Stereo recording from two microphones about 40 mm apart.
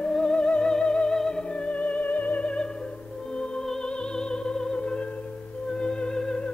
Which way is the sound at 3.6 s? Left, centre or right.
Centre.